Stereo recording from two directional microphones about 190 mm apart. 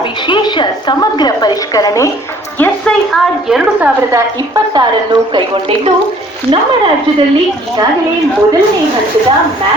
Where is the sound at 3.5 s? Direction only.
5° right (ahead or behind).